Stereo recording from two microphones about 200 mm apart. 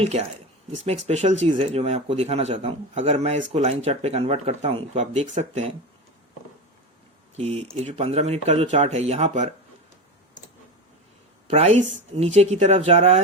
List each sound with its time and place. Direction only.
0.0 s speech: 30° right (ahead or behind)
7.3 s speech: 35° right (ahead or behind)
11.4 s speech: 30° right (ahead or behind)